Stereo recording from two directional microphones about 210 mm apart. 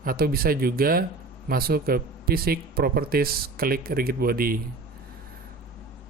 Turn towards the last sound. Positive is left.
turn(degrees=-45)  # may be behind; listen again after turning